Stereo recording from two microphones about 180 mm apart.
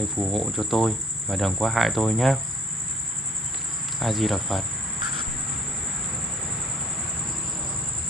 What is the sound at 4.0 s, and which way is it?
Cricket, centre (ahead or behind).